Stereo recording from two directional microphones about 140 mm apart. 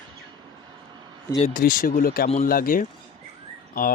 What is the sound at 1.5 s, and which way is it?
Speech, 90° left.